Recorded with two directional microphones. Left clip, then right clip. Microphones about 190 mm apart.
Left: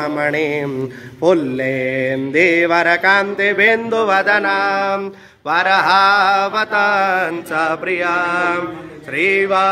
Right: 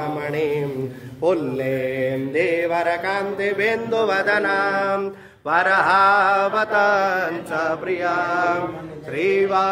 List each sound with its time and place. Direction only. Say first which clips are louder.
0.0 s mantra: left 6 dB; 45° left (ahead or behind)
1.2 s mantra: left 5 dB; 55° left (ahead or behind); by 9.7 s 25° left (ahead or behind)